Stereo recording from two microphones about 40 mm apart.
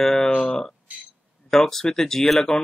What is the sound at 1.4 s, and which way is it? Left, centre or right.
Speech, centre.